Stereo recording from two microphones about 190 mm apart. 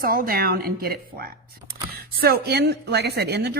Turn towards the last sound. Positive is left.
turn(degrees=-60)  # may be behind; listen again after turning